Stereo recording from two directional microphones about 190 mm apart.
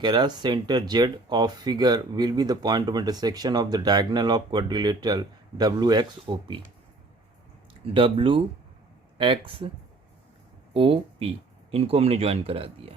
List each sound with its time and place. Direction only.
0.0 s speech: 20° right (ahead or behind)
7.9 s speech: 30° right (ahead or behind)
10.8 s speech: 30° right (ahead or behind)